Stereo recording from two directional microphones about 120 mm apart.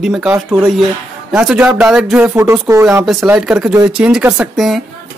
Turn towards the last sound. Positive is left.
turn(degrees=0)  # may be behind; listen again after turning